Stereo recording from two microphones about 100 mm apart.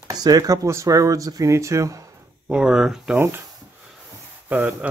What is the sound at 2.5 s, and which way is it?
Speech, 10° right (ahead or behind).